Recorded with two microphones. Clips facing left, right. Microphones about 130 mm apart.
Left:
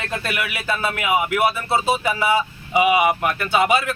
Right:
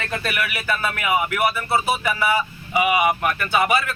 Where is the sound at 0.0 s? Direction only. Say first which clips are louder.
Even; 20° left (ahead or behind).